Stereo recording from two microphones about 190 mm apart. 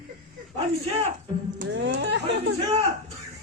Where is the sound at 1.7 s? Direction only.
70° right (ahead or behind).